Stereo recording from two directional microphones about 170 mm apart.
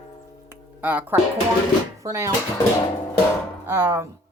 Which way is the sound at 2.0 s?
20° right (ahead or behind).